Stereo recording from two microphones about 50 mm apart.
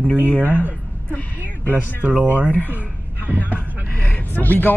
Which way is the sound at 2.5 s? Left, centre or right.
Left.